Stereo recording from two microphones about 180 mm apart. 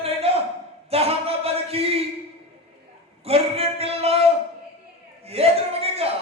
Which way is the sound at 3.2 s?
35° right (ahead or behind).